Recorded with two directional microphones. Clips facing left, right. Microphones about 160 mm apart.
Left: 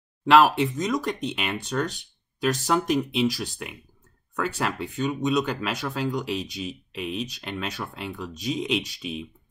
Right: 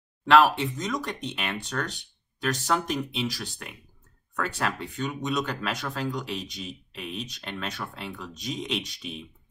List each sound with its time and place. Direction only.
0.2 s speech: 10° left (ahead or behind)